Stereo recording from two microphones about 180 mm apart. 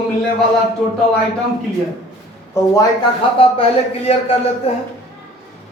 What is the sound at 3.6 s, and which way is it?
Speech, 30° left (ahead or behind).